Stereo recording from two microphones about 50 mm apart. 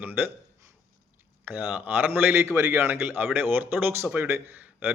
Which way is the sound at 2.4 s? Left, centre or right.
Right.